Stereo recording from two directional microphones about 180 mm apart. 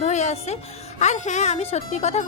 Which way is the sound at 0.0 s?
40° left (ahead or behind).